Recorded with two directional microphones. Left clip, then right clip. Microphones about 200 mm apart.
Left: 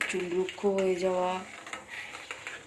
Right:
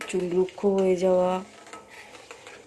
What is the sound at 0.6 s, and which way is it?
Speech, 45° right (ahead or behind).